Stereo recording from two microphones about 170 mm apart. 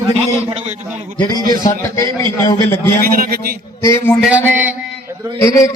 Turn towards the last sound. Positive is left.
turn(degrees=20)  # may be behind; listen again after turning